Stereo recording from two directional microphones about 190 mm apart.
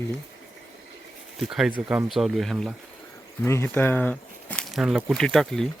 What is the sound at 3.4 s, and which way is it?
Speech, 10° left (ahead or behind).